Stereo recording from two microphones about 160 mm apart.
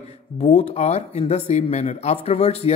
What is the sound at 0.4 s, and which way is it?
Speech, 45° left (ahead or behind).